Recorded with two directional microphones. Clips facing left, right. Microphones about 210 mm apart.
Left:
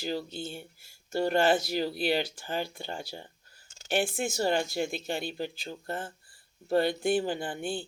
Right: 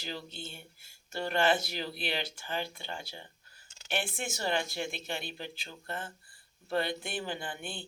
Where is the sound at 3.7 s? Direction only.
45° left (ahead or behind).